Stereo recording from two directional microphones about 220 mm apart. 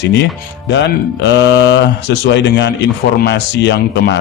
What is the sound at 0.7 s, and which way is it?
Speech, 50° left (ahead or behind).